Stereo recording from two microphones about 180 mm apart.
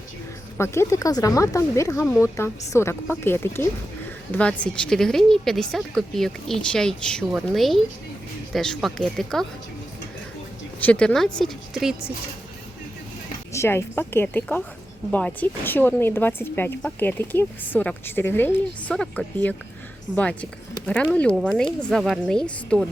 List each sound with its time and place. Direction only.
0.5 s speech: 15° left (ahead or behind)
10.8 s speech: 10° left (ahead or behind)
13.5 s speech: 15° left (ahead or behind)